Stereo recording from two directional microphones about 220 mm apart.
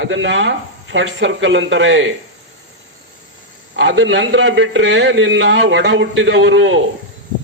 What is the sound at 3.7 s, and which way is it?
A man's voice, 55° right (ahead or behind).